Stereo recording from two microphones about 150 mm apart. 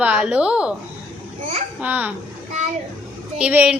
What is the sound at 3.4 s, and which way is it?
Speech, 10° right (ahead or behind).